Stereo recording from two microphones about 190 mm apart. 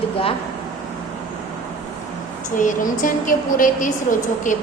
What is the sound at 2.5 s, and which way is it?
A woman's voice, 45° left (ahead or behind).